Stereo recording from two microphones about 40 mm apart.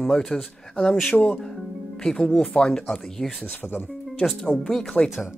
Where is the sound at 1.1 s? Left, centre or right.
Left.